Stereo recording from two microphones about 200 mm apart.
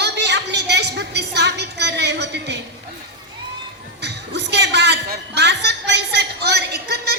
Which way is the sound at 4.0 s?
60° right (ahead or behind).